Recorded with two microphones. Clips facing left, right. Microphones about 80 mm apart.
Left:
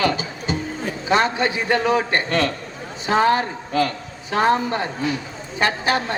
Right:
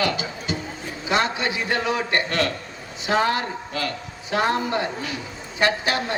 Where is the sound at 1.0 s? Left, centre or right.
Left.